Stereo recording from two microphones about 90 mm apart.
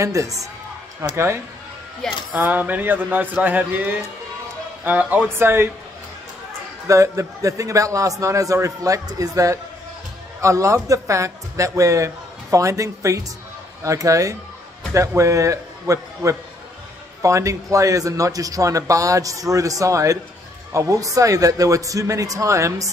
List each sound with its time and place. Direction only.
0.0 s a man's voice: 35° right (ahead or behind)
6.9 s a man's voice: 35° right (ahead or behind)